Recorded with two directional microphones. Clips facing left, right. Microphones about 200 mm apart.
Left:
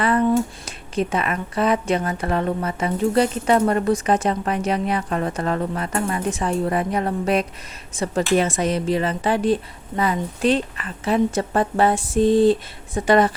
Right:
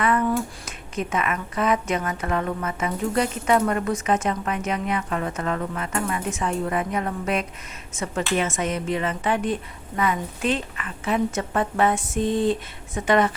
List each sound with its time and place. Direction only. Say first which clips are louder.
0.0 s speech: left 4 dB; 30° left (ahead or behind)